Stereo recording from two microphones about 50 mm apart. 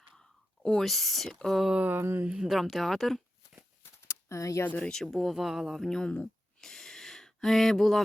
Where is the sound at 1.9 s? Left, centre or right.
Right.